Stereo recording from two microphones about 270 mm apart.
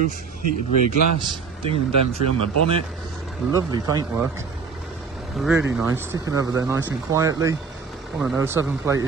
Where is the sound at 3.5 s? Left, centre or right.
Centre.